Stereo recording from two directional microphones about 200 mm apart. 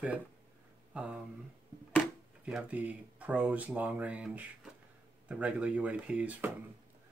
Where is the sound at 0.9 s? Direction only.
5° right (ahead or behind).